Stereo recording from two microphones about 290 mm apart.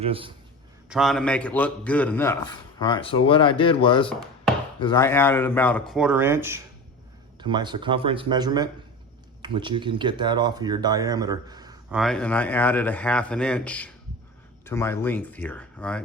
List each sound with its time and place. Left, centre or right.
0.0 s speech: centre
0.9 s a man's voice: centre
11.9 s a man's voice: centre